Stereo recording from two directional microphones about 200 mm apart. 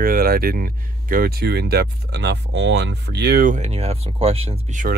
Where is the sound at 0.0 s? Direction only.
45° right (ahead or behind).